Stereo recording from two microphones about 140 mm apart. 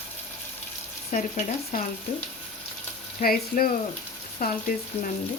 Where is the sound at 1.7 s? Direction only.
90° left.